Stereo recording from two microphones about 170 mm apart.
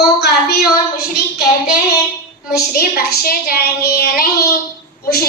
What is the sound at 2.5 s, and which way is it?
A woman's voice, 65° left (ahead or behind).